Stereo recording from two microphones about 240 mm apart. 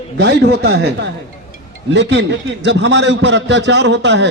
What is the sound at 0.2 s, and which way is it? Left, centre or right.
A man's voice, right.